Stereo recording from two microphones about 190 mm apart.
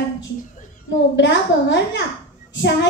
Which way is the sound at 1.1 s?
70° left (ahead or behind).